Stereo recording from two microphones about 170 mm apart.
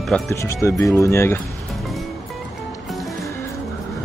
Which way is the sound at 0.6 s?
20° left (ahead or behind).